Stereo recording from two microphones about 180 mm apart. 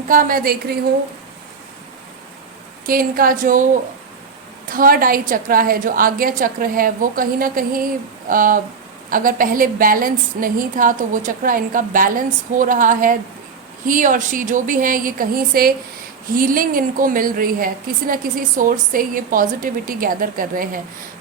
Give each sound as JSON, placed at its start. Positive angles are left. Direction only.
{"t": 0.1, "sound": "a woman's voice", "side_deg": -50}
{"t": 2.8, "sound": "a woman's voice", "side_deg": -55}
{"t": 4.7, "sound": "a woman's voice", "side_deg": -50}